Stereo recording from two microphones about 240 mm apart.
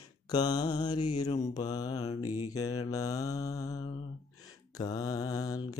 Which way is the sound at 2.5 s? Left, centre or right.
Centre.